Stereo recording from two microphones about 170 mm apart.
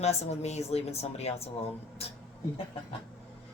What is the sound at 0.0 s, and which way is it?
A woman's voice, 40° left (ahead or behind).